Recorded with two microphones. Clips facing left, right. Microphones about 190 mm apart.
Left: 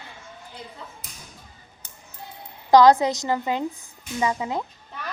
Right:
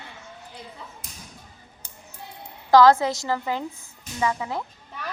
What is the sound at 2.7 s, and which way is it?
A woman's voice, 20° left (ahead or behind).